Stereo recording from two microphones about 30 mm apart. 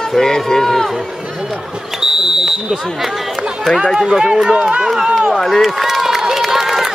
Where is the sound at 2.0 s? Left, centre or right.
Right.